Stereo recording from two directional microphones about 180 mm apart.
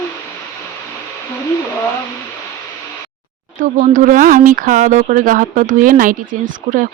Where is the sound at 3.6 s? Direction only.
45° right (ahead or behind).